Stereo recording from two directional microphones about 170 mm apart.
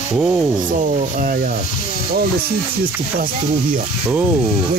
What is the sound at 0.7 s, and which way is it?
Speech, 50° right (ahead or behind).